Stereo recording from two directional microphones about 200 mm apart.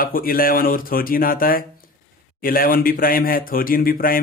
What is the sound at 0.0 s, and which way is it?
Speech, 45° left (ahead or behind).